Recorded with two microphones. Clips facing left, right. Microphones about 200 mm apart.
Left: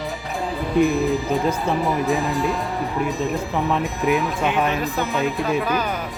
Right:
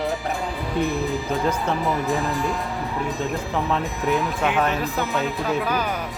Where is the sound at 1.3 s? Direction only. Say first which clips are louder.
Left 2 dB; 5° left (ahead or behind).